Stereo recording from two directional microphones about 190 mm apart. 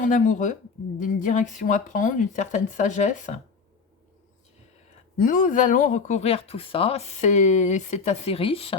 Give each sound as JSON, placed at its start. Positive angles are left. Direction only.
{"t": 0.0, "sound": "speech", "side_deg": 40}
{"t": 5.1, "sound": "speech", "side_deg": 45}